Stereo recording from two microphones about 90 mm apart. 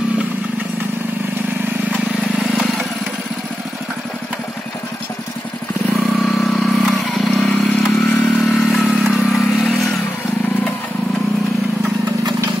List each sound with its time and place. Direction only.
2.5 s vehicle: 5° left (ahead or behind)
5.9 s vehicle: centre (ahead or behind)
8.0 s vehicle: 15° left (ahead or behind)
8.4 s vehicle: centre (ahead or behind)